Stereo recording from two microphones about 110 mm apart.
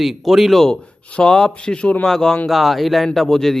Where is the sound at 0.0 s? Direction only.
Centre (ahead or behind).